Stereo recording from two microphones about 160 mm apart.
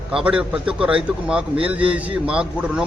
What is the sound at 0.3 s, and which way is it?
A man's voice, 5° right (ahead or behind).